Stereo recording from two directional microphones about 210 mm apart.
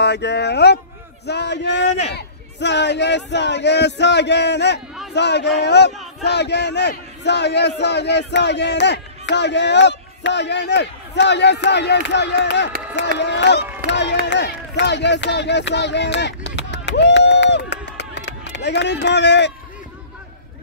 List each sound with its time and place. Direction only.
0.0 s a man's voice: 55° left (ahead or behind)